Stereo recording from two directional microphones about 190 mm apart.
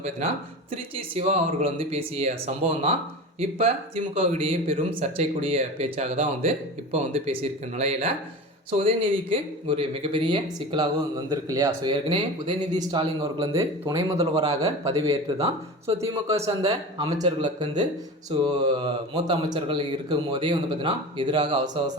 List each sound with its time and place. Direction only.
0.7 s a man's voice: 30° right (ahead or behind)